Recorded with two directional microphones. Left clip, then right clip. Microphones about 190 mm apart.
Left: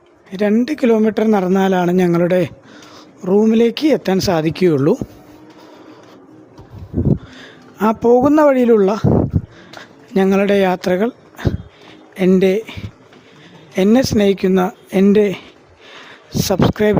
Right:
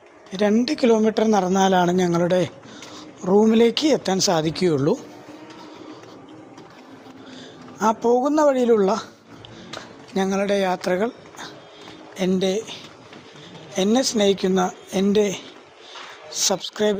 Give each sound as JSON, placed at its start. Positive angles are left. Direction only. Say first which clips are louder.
{"t": 0.3, "sound": "speech", "louder": "left 4 dB", "side_deg": 45}
{"t": 7.3, "sound": "speech", "louder": "left 5 dB", "side_deg": 50}
{"t": 10.2, "sound": "speech", "louder": "left 7 dB", "side_deg": 55}
{"t": 13.7, "sound": "speech", "louder": "left 6 dB", "side_deg": 50}